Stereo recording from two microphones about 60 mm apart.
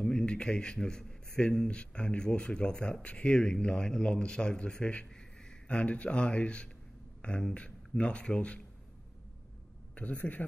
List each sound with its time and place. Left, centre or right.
0.0 s a man's voice: centre
9.9 s speech: left